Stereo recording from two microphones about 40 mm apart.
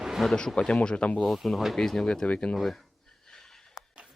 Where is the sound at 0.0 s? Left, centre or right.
Centre.